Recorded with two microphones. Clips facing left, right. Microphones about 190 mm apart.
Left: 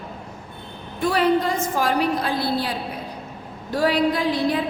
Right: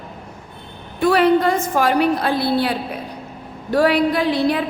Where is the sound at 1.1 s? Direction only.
65° right (ahead or behind).